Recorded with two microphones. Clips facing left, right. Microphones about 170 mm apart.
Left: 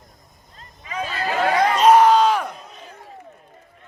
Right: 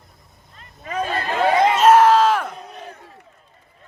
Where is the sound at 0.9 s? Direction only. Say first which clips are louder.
Right 2 dB; 50° right (ahead or behind).